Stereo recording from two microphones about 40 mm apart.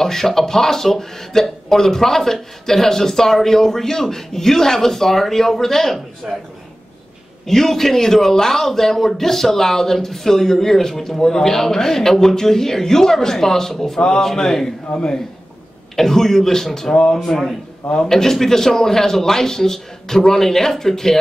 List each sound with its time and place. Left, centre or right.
0.0 s a man's voice: centre
6.3 s a man's voice: centre
7.4 s a man's voice: centre
16.9 s speech: left
17.2 s a man's voice: centre